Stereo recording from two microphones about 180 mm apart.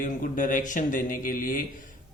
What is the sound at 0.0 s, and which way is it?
Speech, 50° left (ahead or behind).